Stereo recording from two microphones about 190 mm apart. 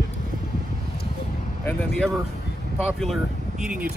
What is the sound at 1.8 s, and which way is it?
Speech, 5° left (ahead or behind).